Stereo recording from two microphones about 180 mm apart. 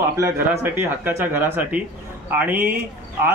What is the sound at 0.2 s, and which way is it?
A man's voice, 10° right (ahead or behind).